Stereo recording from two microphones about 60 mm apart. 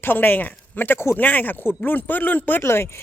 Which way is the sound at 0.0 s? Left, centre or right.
Left.